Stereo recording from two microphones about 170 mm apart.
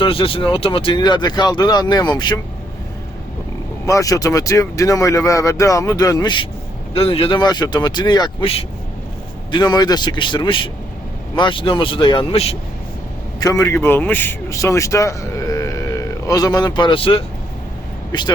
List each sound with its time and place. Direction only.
0.0 s speech: 30° left (ahead or behind)
3.8 s speech: 20° left (ahead or behind); by 12.5 s 35° left (ahead or behind)
13.4 s speech: 20° left (ahead or behind)